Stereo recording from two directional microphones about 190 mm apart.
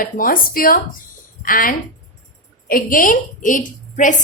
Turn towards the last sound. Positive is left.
turn(degrees=40)  # may be behind; listen again after turning